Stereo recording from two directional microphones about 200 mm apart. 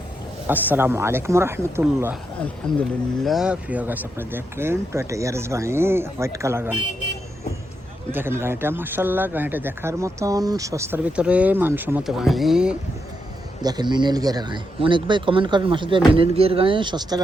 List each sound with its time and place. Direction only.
0.4 s speech: 10° right (ahead or behind)
3.2 s speech: 5° right (ahead or behind)
8.1 s speech: 10° right (ahead or behind)
13.6 s speech: 20° right (ahead or behind)